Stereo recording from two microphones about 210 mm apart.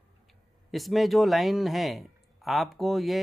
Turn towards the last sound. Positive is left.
turn(degrees=0)  # may be behind; listen again after turning